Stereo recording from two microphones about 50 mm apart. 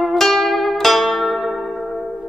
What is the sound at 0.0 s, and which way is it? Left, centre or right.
Zither, centre.